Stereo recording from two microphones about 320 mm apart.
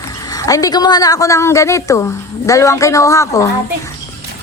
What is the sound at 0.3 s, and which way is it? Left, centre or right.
A woman's voice, centre.